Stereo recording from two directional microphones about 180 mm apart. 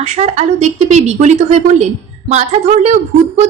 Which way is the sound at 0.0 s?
40° right (ahead or behind).